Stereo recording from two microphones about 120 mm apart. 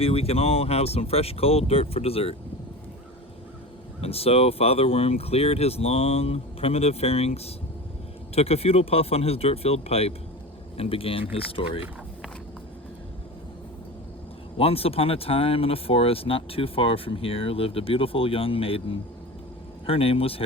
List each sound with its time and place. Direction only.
0.0 s speech: 55° left (ahead or behind)
4.0 s speech: 55° left (ahead or behind)
14.6 s speech: 55° left (ahead or behind)